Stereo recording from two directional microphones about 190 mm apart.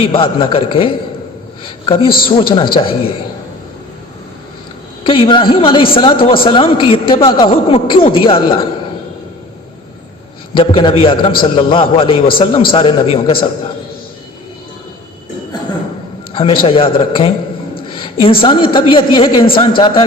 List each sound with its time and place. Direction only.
0.0 s a woman's voice: 30° left (ahead or behind)
5.0 s a woman's voice: 30° left (ahead or behind)
10.5 s a woman's voice: 30° left (ahead or behind)
16.3 s a man's voice: 30° left (ahead or behind)